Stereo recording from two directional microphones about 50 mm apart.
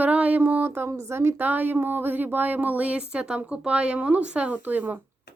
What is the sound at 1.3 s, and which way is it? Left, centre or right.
Speech, right.